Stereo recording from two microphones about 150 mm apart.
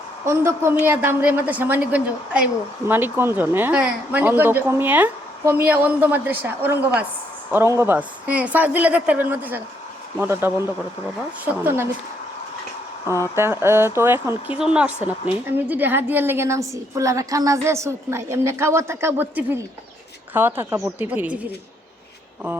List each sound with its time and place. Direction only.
0.3 s a woman's voice: 15° right (ahead or behind)
13.1 s speech: 20° left (ahead or behind)
13.3 s a woman's voice: 15° right (ahead or behind)
14.6 s a woman's voice: 5° right (ahead or behind)